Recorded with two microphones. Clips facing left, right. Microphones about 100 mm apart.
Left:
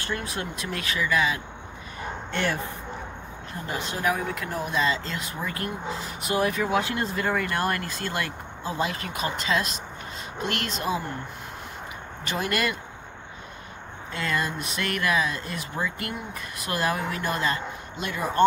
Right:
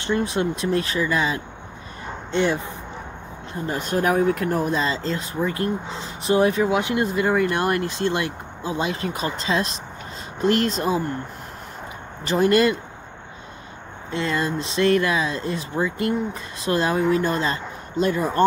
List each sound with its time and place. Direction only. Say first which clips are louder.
0.0 s speech: right 9 dB; 25° right (ahead or behind)
2.3 s speech: right 7 dB; 20° right (ahead or behind)
3.6 s speech: right 5 dB; 45° right (ahead or behind)
12.3 s speech: right 10 dB; 30° right (ahead or behind)
14.1 s speech: right 5 dB; 25° right (ahead or behind)